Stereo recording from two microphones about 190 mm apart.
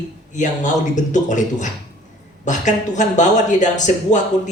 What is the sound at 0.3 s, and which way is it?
Speech, 40° left (ahead or behind).